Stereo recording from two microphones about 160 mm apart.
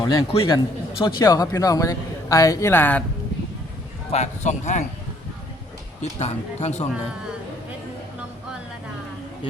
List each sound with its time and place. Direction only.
0.0 s a man's voice: 30° left (ahead or behind); by 3.0 s 10° left (ahead or behind)
4.1 s speech: 45° left (ahead or behind)
6.0 s speech: 45° left (ahead or behind)